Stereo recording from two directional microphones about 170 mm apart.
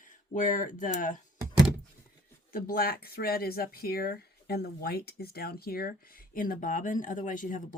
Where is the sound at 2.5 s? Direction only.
60° left (ahead or behind).